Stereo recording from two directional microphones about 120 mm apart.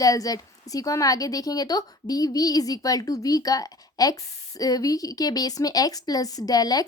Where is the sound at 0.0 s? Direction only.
30° left (ahead or behind).